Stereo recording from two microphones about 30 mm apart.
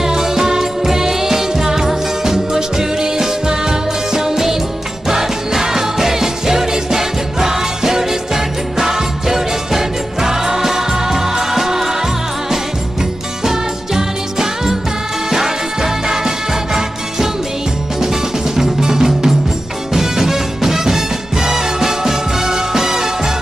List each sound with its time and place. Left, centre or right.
0.0 s music: centre
13.4 s music: centre
18.6 s music: centre